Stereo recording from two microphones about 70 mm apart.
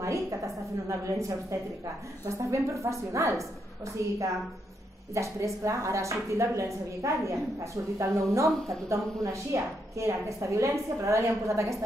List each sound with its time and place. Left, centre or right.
0.8 s a woman's voice: right